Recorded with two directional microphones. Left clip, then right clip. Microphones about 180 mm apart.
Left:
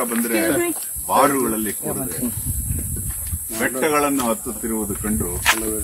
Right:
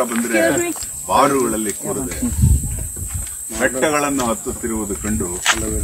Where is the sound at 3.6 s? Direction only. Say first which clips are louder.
Right 2 dB; centre (ahead or behind).